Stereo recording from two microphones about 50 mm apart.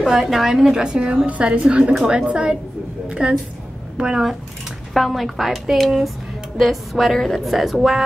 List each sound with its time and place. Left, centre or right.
0.0 s a woman's voice: centre
4.9 s a woman's voice: centre